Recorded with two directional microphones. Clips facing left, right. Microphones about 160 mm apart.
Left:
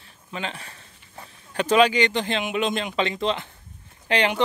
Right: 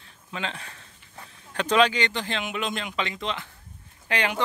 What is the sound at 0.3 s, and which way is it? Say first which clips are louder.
Speech: left 1 dB; 5° left (ahead or behind).